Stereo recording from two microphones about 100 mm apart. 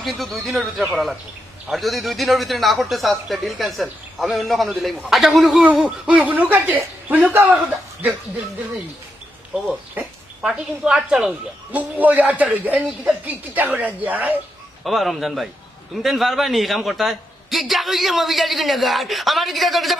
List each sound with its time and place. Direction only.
0.0 s a man's voice: centre (ahead or behind)
5.5 s a man's voice: 15° right (ahead or behind)
10.4 s a man's voice: 5° right (ahead or behind)
14.8 s a man's voice: centre (ahead or behind)